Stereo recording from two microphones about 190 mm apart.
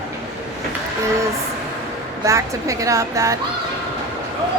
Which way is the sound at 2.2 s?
15° right (ahead or behind).